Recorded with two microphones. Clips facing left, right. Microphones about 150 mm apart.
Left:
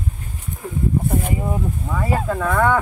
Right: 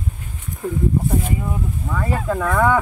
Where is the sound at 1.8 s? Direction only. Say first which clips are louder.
Right 1 dB; 10° left (ahead or behind).